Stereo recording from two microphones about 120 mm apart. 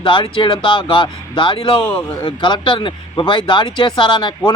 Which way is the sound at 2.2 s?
45° left (ahead or behind).